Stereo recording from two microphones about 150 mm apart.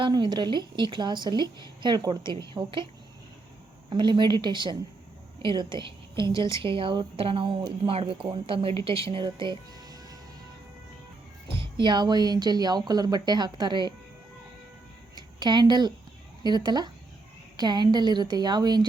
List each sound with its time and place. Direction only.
0.0 s speech: 30° right (ahead or behind)
3.8 s a woman's voice: 30° right (ahead or behind)
11.6 s speech: 30° right (ahead or behind)
15.4 s speech: 30° right (ahead or behind)